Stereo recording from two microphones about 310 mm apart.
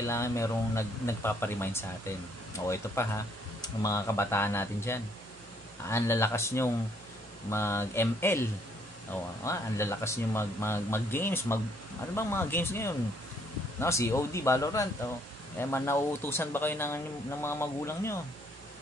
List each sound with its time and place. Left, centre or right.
0.0 s speech: centre